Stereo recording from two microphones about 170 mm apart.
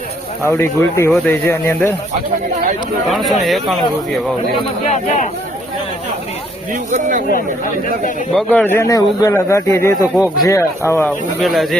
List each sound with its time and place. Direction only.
0.4 s speech: 15° left (ahead or behind)
3.1 s speech: centre (ahead or behind)
4.9 s speech: 45° left (ahead or behind)
6.9 s speech: 50° right (ahead or behind)
7.3 s speech: 55° left (ahead or behind)
8.3 s speech: 5° left (ahead or behind)
11.3 s speech: centre (ahead or behind)